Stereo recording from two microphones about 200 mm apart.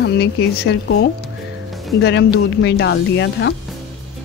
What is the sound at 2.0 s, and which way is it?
A woman's voice, 60° left (ahead or behind).